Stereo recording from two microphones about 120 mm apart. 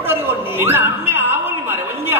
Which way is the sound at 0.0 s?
20° right (ahead or behind).